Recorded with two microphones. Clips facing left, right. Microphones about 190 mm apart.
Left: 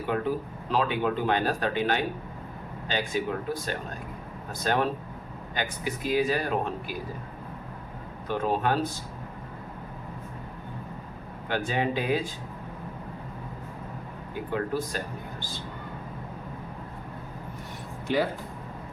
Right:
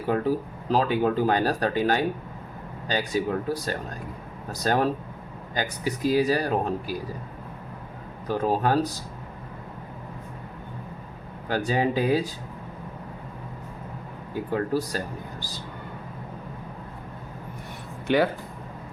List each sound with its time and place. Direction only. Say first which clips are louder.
0.1 s speech: right 4 dB; 40° right (ahead or behind)
8.3 s speech: right 3 dB; 40° right (ahead or behind)
11.4 s speech: right 3 dB; 40° right (ahead or behind)
14.5 s speech: right 3 dB; 40° right (ahead or behind)
18.1 s speech: right 4 dB; 65° right (ahead or behind)